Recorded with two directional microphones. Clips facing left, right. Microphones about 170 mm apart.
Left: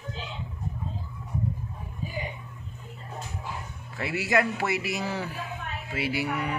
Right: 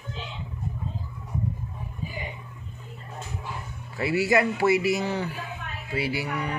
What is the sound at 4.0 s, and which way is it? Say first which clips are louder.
A man's voice: right 3 dB; centre (ahead or behind).